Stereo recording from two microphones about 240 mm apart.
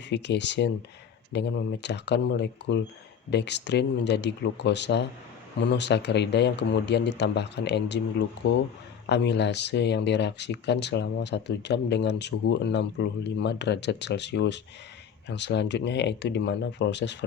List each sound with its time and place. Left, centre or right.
0.1 s speech: left